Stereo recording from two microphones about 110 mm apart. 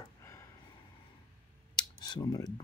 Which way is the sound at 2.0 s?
40° left (ahead or behind).